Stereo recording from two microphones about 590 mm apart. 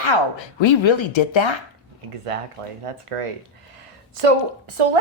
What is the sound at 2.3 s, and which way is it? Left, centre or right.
Speech, right.